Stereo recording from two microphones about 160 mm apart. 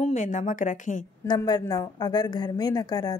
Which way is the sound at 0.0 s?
50° left (ahead or behind).